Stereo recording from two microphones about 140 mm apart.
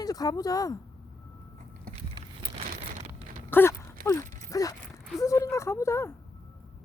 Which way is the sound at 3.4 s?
15° left (ahead or behind).